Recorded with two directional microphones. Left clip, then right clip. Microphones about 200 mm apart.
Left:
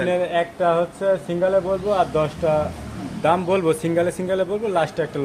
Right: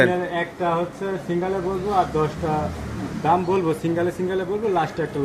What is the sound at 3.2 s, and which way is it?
Speech, 55° left (ahead or behind).